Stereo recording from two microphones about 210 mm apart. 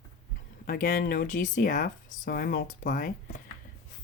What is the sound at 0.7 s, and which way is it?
Speech, 40° left (ahead or behind).